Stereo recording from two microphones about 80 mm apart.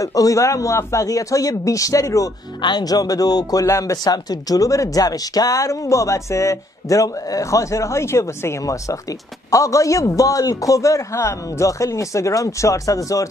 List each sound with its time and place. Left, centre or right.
0.0 s speech: left
2.6 s speech: left
3.6 s a man's voice: left